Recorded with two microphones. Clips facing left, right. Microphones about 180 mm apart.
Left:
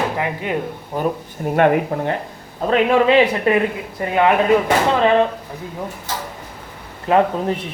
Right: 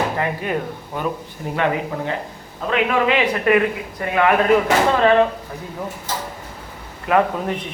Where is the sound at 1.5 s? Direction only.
55° left (ahead or behind).